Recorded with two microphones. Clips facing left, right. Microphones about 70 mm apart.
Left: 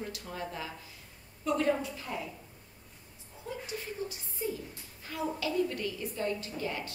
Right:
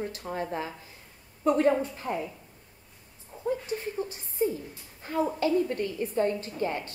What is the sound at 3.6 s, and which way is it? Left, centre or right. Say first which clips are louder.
A woman's voice: right 6 dB; right.